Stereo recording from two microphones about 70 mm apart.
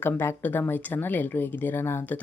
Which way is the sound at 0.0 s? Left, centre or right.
Left.